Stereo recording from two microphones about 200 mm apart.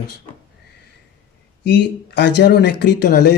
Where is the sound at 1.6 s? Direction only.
60° left (ahead or behind).